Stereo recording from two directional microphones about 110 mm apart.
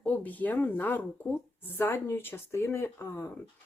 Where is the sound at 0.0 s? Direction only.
15° left (ahead or behind).